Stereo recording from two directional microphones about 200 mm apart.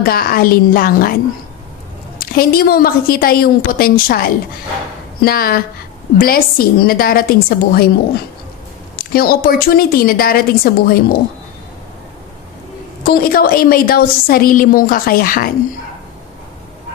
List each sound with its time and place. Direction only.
0.0 s a woman's voice: 50° left (ahead or behind)
8.9 s a woman's voice: 50° left (ahead or behind)
13.0 s a woman's voice: 50° left (ahead or behind)